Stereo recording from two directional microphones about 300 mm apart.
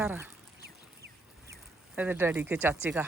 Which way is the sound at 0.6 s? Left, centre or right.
Right.